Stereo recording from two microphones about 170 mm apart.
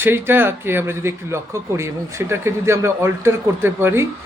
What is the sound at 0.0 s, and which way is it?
Speech, 15° right (ahead or behind).